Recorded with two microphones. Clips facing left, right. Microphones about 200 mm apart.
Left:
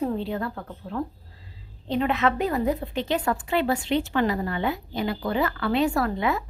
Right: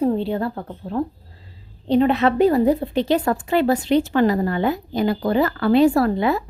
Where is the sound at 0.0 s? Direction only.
30° right (ahead or behind).